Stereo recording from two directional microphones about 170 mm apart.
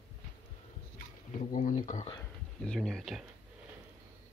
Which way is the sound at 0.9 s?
50° left (ahead or behind).